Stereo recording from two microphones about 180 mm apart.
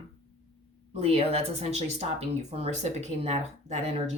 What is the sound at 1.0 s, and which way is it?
Speech, 35° right (ahead or behind).